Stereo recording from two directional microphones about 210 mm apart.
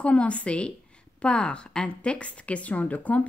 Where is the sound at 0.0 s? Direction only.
5° left (ahead or behind).